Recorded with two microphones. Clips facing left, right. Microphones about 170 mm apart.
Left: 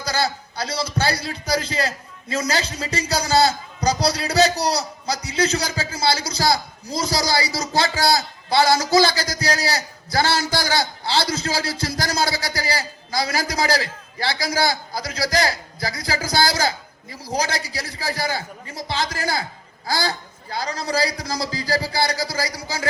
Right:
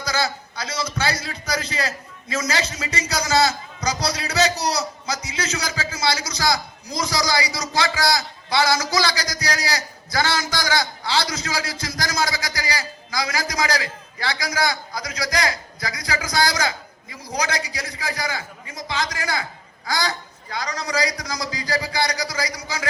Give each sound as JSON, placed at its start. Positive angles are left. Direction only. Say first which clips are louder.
{"t": 0.0, "sound": "a man's voice", "louder": "left 1 dB", "side_deg": 30}